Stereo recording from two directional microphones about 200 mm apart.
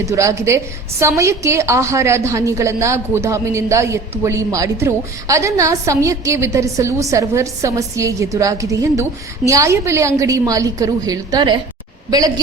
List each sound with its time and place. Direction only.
0.0 s a woman's voice: 15° right (ahead or behind)